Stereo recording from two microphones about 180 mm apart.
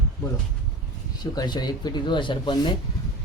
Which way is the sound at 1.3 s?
25° left (ahead or behind).